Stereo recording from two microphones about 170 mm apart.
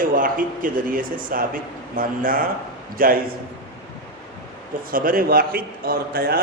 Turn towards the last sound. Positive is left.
turn(degrees=-60)  # may be behind; listen again after turning